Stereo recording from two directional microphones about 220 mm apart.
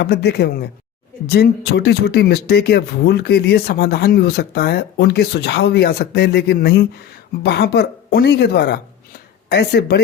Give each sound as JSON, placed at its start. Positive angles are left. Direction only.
{"t": 0.0, "sound": "speech", "side_deg": 50}